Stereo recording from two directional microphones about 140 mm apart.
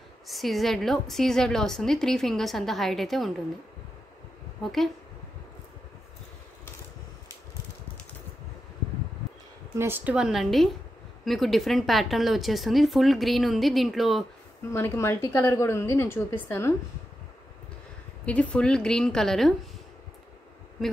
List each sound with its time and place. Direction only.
0.3 s speech: centre (ahead or behind)
9.8 s speech: 15° right (ahead or behind)
14.7 s a woman's voice: 20° left (ahead or behind)
18.2 s speech: 10° left (ahead or behind)